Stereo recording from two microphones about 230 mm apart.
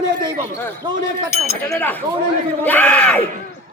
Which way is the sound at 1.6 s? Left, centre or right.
Centre.